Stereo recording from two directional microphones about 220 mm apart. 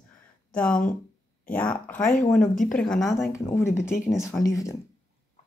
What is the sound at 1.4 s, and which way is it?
Speech, 5° left (ahead or behind).